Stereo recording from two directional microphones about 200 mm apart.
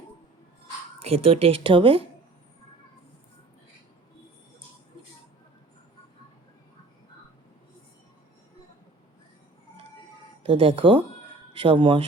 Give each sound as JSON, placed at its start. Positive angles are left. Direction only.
{"t": 1.0, "sound": "speech", "side_deg": -30}
{"t": 10.4, "sound": "speech", "side_deg": -25}